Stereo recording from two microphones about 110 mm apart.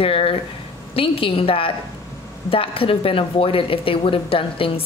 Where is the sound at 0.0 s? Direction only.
60° left (ahead or behind).